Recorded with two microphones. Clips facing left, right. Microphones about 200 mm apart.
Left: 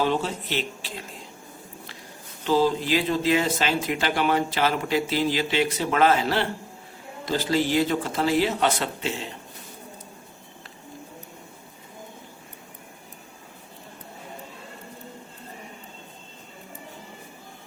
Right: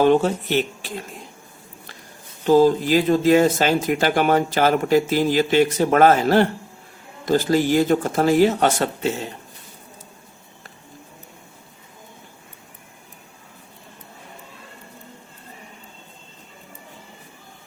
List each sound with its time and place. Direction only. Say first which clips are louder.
0.0 s speech: right 8 dB; 50° right (ahead or behind)
2.5 s speech: right 7 dB; 45° right (ahead or behind)